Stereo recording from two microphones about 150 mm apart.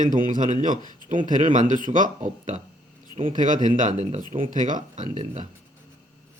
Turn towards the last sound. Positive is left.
turn(degrees=-55)  # may be behind; listen again after turning